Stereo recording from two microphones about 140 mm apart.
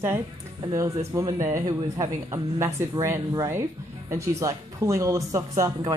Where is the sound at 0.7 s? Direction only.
25° right (ahead or behind).